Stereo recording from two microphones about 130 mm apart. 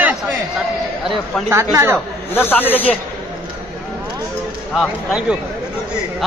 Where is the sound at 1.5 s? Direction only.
20° right (ahead or behind).